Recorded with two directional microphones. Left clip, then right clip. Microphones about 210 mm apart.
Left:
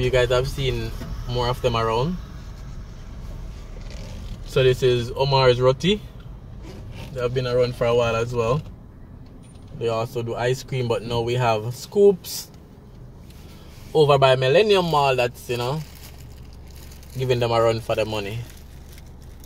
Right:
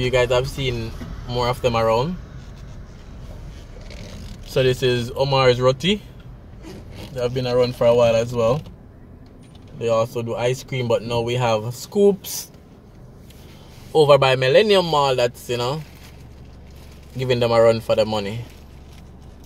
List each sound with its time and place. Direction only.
0.0 s speech: 20° right (ahead or behind)
4.6 s speech: 25° right (ahead or behind)
7.9 s speech: 25° right (ahead or behind)
9.8 s speech: 25° right (ahead or behind)
13.9 s speech: 25° right (ahead or behind)
17.2 s speech: 20° right (ahead or behind)